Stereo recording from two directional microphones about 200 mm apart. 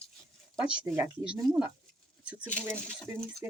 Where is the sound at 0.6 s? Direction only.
5° right (ahead or behind).